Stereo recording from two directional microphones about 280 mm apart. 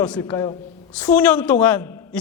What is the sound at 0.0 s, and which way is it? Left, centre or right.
A man's voice, centre.